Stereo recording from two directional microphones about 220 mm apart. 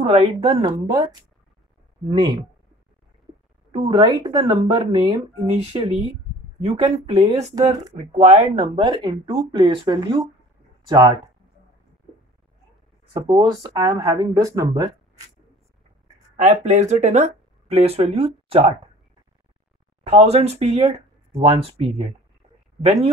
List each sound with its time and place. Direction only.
0.0 s speech: 30° right (ahead or behind)
3.7 s speech: 25° right (ahead or behind)
13.1 s speech: 15° right (ahead or behind)
16.3 s speech: 30° right (ahead or behind)
20.0 s speech: 30° right (ahead or behind)